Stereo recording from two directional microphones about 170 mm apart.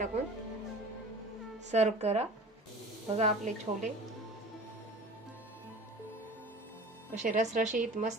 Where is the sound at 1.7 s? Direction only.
40° right (ahead or behind).